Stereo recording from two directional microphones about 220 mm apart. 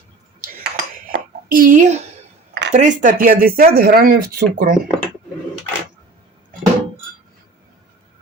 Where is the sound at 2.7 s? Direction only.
35° right (ahead or behind).